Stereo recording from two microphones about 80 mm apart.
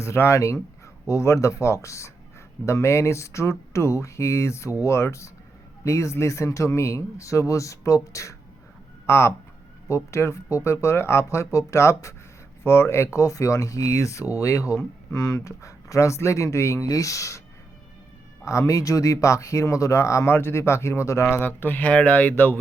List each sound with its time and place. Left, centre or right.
0.0 s speech: left
18.4 s speech: left
21.3 s speech: left